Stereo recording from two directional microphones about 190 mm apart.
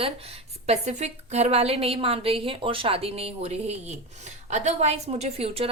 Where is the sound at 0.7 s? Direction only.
35° right (ahead or behind).